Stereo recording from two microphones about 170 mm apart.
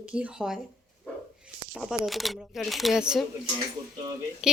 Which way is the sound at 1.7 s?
Centre (ahead or behind).